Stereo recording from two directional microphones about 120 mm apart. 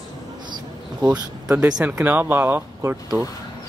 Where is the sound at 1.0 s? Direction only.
10° right (ahead or behind).